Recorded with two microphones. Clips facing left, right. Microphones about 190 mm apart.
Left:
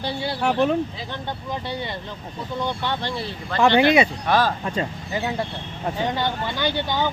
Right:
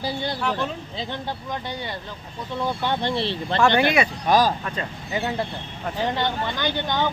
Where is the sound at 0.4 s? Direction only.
60° left (ahead or behind).